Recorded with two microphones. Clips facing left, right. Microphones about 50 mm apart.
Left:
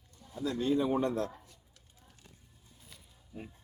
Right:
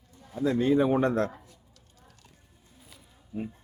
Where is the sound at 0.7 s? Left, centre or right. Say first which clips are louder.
Right 4 dB; right.